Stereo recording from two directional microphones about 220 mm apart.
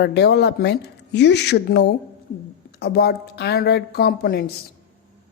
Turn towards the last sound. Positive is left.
turn(degrees=45)  # may be behind; listen again after turning